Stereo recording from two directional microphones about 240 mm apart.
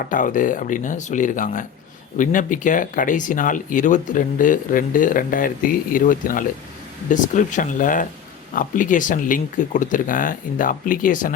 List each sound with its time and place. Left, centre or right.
0.0 s speech: left